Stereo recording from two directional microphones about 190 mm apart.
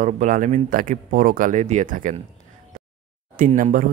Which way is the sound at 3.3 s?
45° right (ahead or behind).